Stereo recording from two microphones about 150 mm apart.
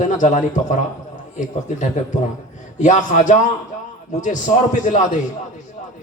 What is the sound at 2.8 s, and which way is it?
A man's voice, 55° left (ahead or behind).